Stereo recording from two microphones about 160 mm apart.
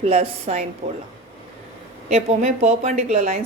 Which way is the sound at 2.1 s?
40° right (ahead or behind).